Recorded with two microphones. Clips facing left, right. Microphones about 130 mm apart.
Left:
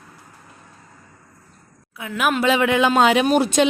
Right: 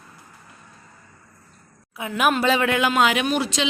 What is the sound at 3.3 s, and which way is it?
Speech, 50° left (ahead or behind).